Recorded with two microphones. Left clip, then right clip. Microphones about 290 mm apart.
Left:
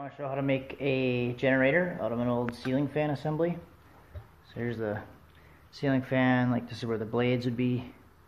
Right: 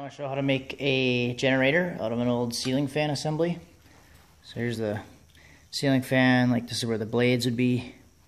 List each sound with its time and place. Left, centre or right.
0.0 s speech: right
4.6 s speech: right